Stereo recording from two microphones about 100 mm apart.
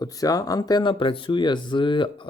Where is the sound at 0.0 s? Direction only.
35° left (ahead or behind).